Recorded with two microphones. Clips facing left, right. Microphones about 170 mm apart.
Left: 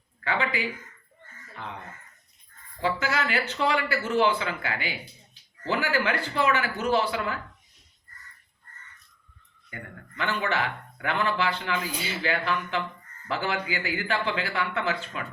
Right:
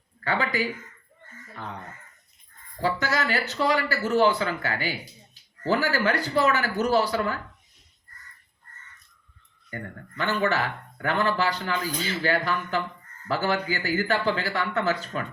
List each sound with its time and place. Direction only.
0.3 s a man's voice: 40° right (ahead or behind)
2.8 s a man's voice: 40° right (ahead or behind)
9.6 s speech: 40° right (ahead or behind)
11.9 s speech: 10° left (ahead or behind)
12.2 s a man's voice: 40° right (ahead or behind)